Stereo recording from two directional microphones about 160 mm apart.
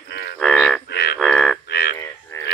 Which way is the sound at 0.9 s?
90° left.